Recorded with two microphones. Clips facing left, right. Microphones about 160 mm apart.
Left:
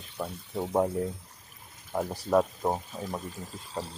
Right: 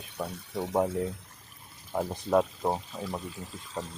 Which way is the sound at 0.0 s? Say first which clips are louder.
Even; centre (ahead or behind).